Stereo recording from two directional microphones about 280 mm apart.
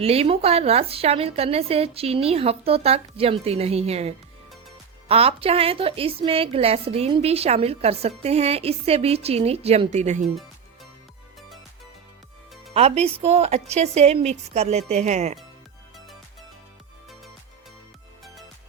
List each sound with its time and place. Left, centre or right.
0.0 s a woman's voice: right
12.7 s a woman's voice: right